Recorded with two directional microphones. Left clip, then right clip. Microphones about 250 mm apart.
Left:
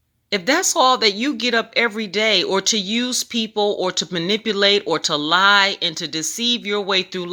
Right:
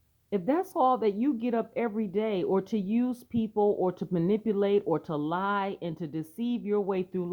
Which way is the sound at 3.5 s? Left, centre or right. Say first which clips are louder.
Left 5 dB; left.